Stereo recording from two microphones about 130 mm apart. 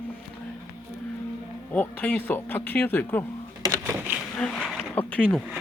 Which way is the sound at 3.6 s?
25° right (ahead or behind).